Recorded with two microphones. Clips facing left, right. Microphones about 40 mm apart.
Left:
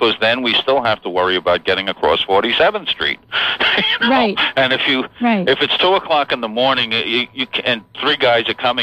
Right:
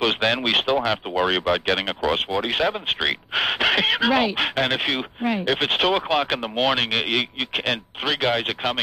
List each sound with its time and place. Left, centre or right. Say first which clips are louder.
0.0 s speech: left 6 dB; left
2.9 s speech: left 4 dB; centre